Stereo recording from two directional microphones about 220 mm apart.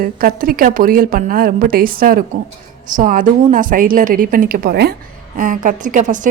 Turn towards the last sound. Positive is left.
turn(degrees=-35)  # may be behind; listen again after turning